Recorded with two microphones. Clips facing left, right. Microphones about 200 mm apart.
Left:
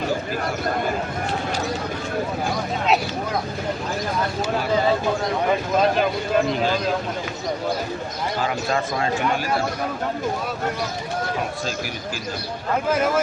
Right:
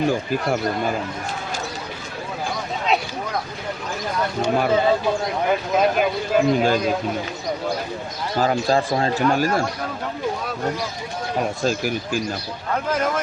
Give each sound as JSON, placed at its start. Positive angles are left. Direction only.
{"t": 5.5, "sound": "speech", "side_deg": -5}
{"t": 8.4, "sound": "speech", "side_deg": -35}